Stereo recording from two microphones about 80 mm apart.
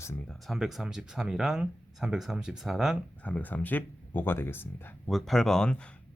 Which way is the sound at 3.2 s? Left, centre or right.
Left.